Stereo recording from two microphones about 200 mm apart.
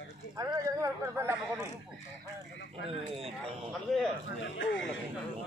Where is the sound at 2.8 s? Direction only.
30° right (ahead or behind).